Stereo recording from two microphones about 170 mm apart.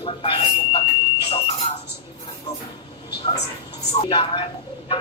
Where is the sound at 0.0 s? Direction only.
30° left (ahead or behind).